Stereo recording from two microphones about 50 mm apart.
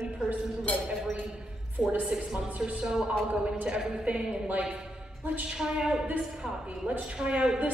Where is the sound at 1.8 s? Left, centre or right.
Centre.